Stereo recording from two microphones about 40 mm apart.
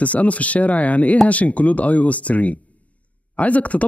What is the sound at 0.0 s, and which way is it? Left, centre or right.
Speech, left.